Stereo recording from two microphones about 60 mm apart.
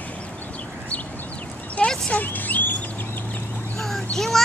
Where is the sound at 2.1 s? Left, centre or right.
Left.